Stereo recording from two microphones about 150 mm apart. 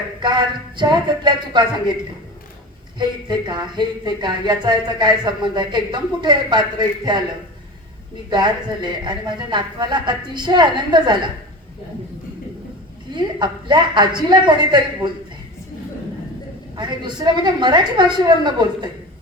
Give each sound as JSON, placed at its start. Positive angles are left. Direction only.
{"t": 0.2, "sound": "speech", "side_deg": -30}
{"t": 3.0, "sound": "speech", "side_deg": -30}
{"t": 8.3, "sound": "speech", "side_deg": -30}
{"t": 13.1, "sound": "speech", "side_deg": -30}
{"t": 16.7, "sound": "speech", "side_deg": -30}